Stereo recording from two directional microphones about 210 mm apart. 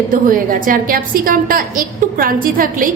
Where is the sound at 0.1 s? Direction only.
40° right (ahead or behind).